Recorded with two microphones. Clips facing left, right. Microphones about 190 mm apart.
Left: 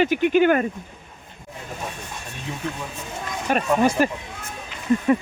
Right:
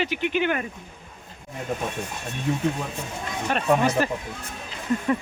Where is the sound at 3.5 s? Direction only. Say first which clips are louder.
Left 2 dB; 10° left (ahead or behind).